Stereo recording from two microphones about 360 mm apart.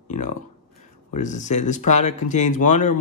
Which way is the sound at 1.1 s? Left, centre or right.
Centre.